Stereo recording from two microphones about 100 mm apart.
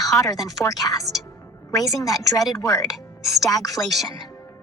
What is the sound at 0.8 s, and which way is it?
Speech, 25° left (ahead or behind).